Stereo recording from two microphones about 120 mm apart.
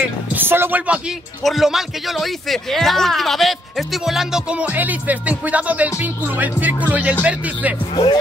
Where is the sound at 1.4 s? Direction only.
Centre (ahead or behind).